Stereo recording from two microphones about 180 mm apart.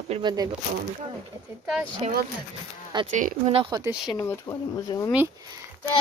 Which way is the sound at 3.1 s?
40° right (ahead or behind).